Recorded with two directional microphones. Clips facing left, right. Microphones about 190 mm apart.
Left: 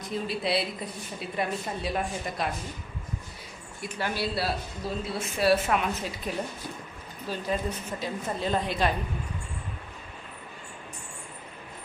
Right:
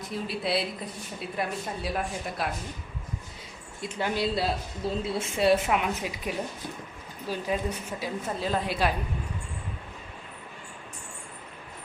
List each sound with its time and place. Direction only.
0.1 s a woman's voice: 5° right (ahead or behind)
3.8 s a woman's voice: 20° right (ahead or behind); by 8.9 s 5° right (ahead or behind)